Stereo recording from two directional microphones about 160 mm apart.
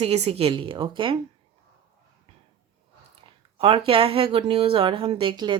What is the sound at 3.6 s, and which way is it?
Speech, 35° right (ahead or behind).